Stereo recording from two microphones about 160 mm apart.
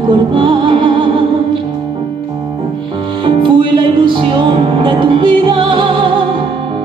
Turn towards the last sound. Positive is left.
turn(degrees=-30)  # may be behind; listen again after turning